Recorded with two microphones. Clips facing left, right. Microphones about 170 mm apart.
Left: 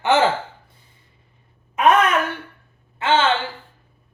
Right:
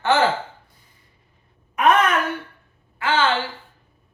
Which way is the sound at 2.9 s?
25° left (ahead or behind).